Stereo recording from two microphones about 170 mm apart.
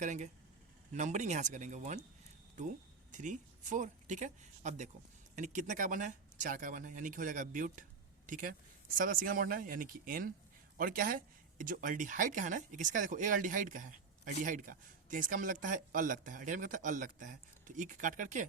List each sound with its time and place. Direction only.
0.0 s speech: 45° right (ahead or behind)